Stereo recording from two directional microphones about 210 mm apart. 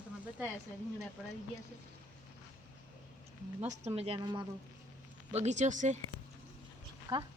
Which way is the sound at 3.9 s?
25° right (ahead or behind).